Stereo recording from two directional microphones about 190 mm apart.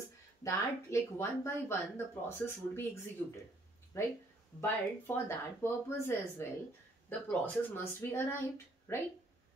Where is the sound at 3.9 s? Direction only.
15° left (ahead or behind).